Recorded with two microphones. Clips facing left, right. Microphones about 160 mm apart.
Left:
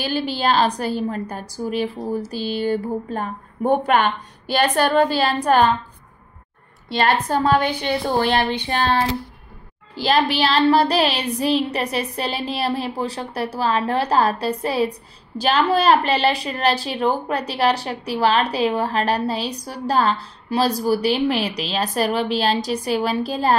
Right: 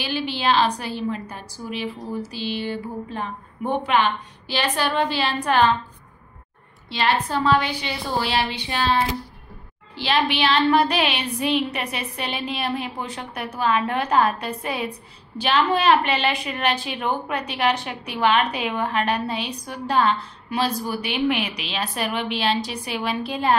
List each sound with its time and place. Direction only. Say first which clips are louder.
0.0 s a woman's voice: left 3 dB; 40° left (ahead or behind)
6.9 s a woman's voice: left 3 dB; 45° left (ahead or behind)
9.9 s a woman's voice: left 3 dB; 40° left (ahead or behind)